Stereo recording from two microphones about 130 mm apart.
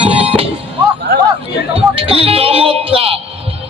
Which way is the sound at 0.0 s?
45° right (ahead or behind).